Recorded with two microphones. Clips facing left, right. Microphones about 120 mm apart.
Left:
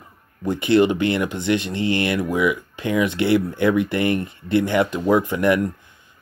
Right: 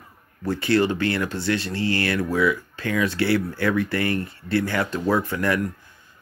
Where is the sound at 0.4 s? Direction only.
20° left (ahead or behind).